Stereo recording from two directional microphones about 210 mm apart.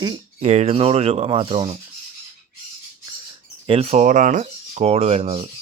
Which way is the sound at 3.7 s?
30° right (ahead or behind).